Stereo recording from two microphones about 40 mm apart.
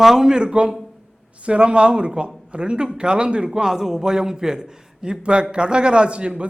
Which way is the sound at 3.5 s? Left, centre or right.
Centre.